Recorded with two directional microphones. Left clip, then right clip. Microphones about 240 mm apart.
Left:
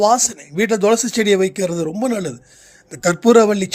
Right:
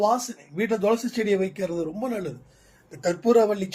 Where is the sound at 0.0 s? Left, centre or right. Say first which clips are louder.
Left 8 dB; left.